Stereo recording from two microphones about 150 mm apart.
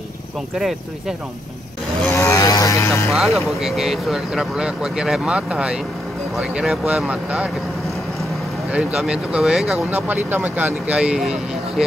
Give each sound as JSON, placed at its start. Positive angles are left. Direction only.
{"t": 0.6, "sound": "speech", "side_deg": 0}
{"t": 2.0, "sound": "vehicle", "side_deg": 20}
{"t": 3.1, "sound": "speech", "side_deg": 0}
{"t": 8.7, "sound": "speech", "side_deg": -5}